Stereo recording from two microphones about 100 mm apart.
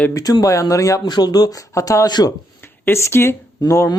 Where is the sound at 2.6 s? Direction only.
25° left (ahead or behind).